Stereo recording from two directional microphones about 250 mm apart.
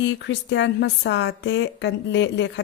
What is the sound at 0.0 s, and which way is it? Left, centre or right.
A woman's voice, left.